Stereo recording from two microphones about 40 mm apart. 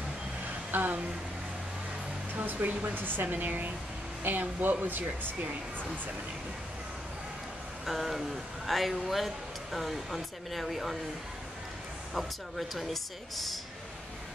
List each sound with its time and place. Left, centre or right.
0.7 s a woman's voice: right
2.3 s speech: right
7.8 s speech: centre
12.1 s speech: centre